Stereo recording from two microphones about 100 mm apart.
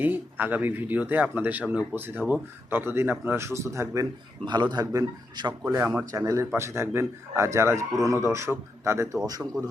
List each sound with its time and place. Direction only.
0.0 s a man's voice: 20° right (ahead or behind)
4.4 s a man's voice: 50° right (ahead or behind)
5.6 s a man's voice: 20° right (ahead or behind)
6.1 s a man's voice: 35° right (ahead or behind)